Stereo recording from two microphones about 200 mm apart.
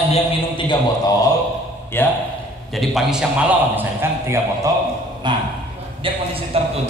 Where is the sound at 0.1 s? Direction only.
25° left (ahead or behind).